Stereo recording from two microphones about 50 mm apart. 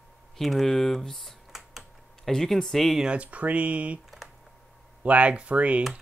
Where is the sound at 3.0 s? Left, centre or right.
Right.